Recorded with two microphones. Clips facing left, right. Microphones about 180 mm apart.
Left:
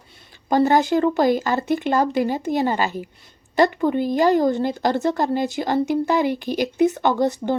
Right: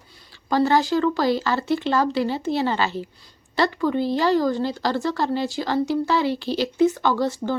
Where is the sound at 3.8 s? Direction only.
55° left (ahead or behind).